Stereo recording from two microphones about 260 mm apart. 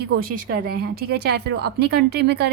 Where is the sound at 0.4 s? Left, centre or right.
Right.